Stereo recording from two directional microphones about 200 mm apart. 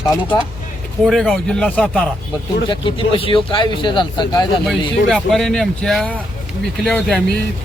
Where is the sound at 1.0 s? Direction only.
Centre (ahead or behind).